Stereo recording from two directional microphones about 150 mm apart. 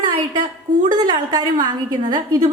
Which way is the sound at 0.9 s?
30° right (ahead or behind).